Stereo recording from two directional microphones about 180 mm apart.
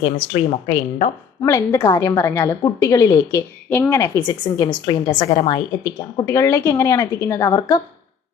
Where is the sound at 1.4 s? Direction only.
15° left (ahead or behind).